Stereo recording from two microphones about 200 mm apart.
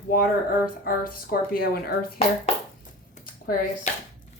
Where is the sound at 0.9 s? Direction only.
45° left (ahead or behind).